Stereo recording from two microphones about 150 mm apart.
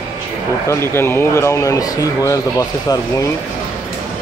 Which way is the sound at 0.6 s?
15° left (ahead or behind).